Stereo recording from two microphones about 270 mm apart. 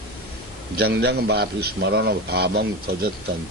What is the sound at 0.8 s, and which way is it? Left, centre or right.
A man's voice, right.